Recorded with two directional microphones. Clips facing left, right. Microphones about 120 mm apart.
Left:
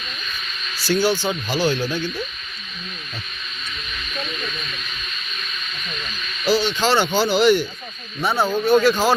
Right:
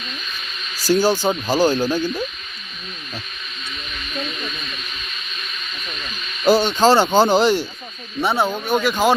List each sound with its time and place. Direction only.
0.8 s speech: 40° right (ahead or behind)
6.4 s speech: 50° right (ahead or behind); by 7.7 s 35° right (ahead or behind)
8.2 s speech: 25° right (ahead or behind)